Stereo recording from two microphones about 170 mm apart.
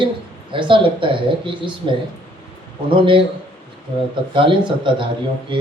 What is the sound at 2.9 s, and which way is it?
Speech, 30° right (ahead or behind).